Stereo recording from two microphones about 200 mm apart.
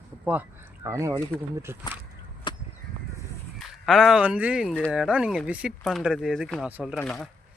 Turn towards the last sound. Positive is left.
turn(degrees=5)  # may be behind; listen again after turning